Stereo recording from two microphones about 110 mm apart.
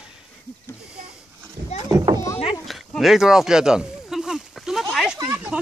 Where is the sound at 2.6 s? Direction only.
Centre (ahead or behind).